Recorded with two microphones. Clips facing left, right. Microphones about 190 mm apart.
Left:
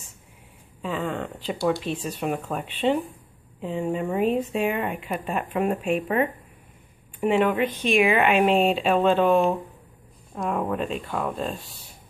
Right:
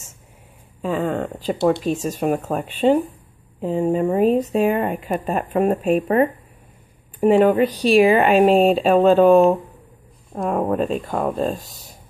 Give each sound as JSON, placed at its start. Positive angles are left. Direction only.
{"t": 0.8, "sound": "speech", "side_deg": -45}